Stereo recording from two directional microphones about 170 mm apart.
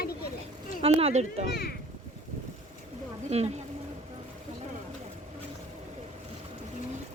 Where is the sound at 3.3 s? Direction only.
40° right (ahead or behind).